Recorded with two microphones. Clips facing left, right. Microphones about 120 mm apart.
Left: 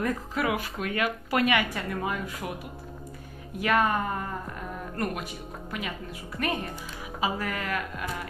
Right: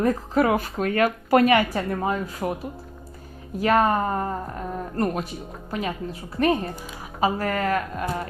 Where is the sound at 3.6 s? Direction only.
35° right (ahead or behind).